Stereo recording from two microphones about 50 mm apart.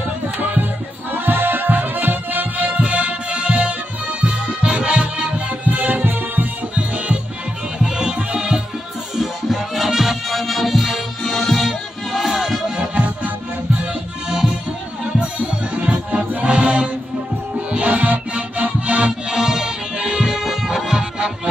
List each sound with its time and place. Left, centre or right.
0.4 s music: right
7.8 s music: centre
9.1 s music: centre
12.7 s music: centre
15.1 s music: right
19.2 s music: centre